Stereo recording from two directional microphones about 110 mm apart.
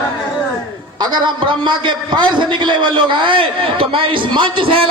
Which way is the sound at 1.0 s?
40° right (ahead or behind).